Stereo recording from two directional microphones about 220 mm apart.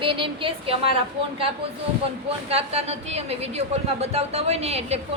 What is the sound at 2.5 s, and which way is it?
A woman's voice, 30° right (ahead or behind).